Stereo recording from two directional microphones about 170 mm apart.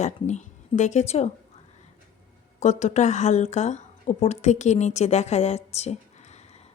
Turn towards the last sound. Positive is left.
turn(degrees=40)  # may be behind; listen again after turning